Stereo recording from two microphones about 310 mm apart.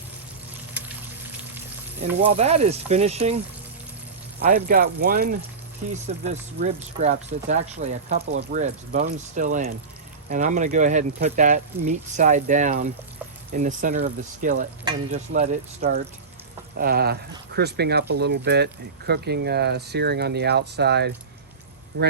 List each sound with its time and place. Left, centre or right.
0.7 s water: centre
2.2 s speech: right
4.4 s speech: right